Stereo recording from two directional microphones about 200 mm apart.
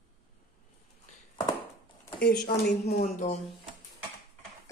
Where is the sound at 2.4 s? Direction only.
50° left (ahead or behind).